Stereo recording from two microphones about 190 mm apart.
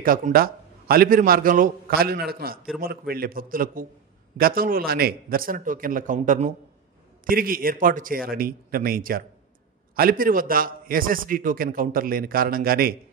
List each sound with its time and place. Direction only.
0.0 s a man's voice: 50° right (ahead or behind)